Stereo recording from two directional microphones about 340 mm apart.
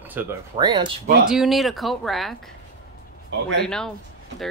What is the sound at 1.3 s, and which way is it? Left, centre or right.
Speech, centre.